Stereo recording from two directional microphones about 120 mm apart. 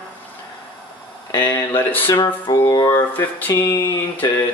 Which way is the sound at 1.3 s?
25° left (ahead or behind).